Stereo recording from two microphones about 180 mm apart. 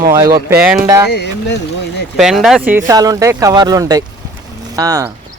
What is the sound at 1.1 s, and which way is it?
Speech, 70° left (ahead or behind).